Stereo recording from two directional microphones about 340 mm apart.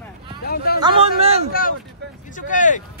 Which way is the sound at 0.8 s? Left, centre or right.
Centre.